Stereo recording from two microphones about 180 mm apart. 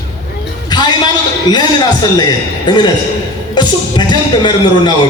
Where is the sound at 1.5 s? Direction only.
25° left (ahead or behind).